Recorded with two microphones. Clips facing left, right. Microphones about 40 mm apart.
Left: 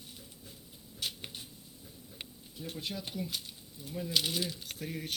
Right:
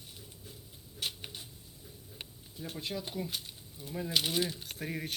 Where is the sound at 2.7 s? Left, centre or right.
Right.